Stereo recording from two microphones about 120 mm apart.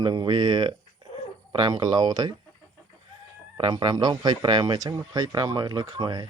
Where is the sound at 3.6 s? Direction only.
35° right (ahead or behind).